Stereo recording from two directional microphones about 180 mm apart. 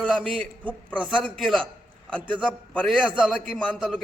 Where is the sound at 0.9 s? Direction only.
5° left (ahead or behind).